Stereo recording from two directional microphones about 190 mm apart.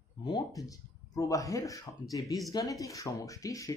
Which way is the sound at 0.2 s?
20° left (ahead or behind).